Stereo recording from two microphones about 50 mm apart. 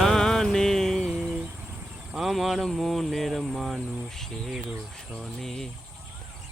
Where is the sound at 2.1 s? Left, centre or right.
Centre.